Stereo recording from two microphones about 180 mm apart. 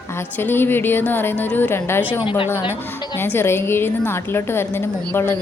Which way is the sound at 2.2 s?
30° left (ahead or behind).